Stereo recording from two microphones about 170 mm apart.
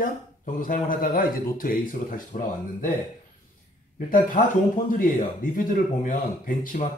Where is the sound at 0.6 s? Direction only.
55° left (ahead or behind).